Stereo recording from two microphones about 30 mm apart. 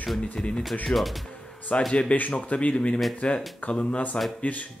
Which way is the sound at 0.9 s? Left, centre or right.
Centre.